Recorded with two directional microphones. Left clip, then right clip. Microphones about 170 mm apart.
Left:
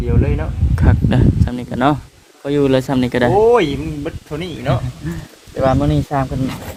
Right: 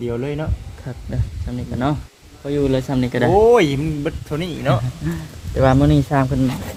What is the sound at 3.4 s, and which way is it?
Speech, 85° right.